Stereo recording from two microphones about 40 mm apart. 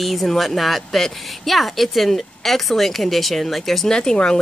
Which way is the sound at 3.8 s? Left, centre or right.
Centre.